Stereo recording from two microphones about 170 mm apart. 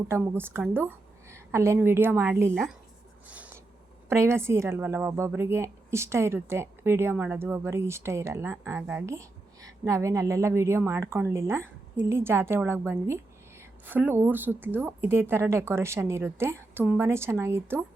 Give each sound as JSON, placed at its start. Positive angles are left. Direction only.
{"t": 0.1, "sound": "a woman's voice", "side_deg": -15}
{"t": 3.2, "sound": "a sound", "side_deg": -10}
{"t": 4.1, "sound": "a woman's voice", "side_deg": -15}